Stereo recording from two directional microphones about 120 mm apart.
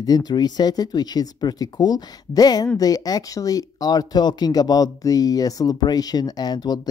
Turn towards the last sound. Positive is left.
turn(degrees=35)  # may be behind; listen again after turning